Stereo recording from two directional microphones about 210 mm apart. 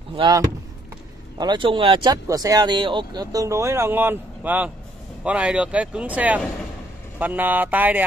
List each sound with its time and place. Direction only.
0.1 s speech: 25° right (ahead or behind)
1.4 s speech: 20° right (ahead or behind)